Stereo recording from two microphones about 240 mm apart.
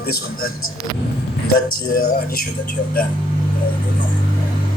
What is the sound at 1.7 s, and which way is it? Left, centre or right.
Speech, left.